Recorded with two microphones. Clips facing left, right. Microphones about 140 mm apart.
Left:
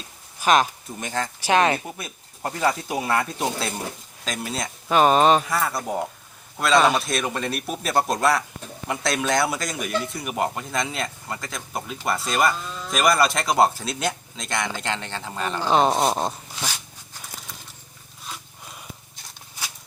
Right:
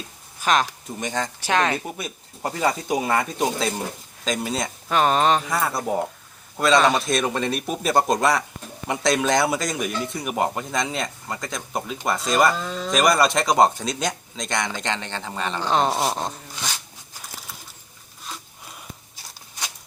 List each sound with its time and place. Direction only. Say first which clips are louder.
0.4 s speech: left 2 dB; 10° left (ahead or behind)
2.0 s speech: right 3 dB; 5° right (ahead or behind)
12.5 s speech: right 5 dB; 90° right
12.9 s speech: right 1 dB; centre (ahead or behind)
16.0 s a sound: left 3 dB; 15° left (ahead or behind)